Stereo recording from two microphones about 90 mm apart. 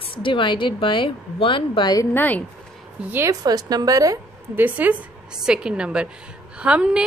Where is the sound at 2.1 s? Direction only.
20° left (ahead or behind).